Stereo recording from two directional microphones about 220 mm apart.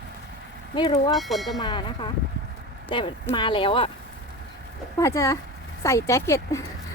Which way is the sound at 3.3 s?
20° left (ahead or behind).